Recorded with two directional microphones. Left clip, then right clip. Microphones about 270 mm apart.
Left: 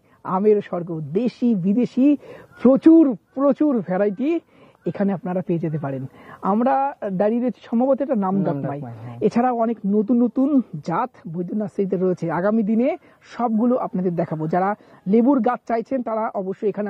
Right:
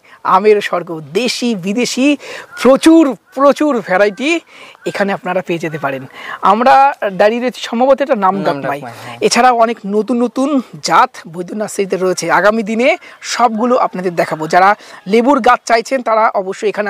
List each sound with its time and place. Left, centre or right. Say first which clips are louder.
0.2 s speech: right 9 dB; centre
11.7 s speech: right 7 dB; centre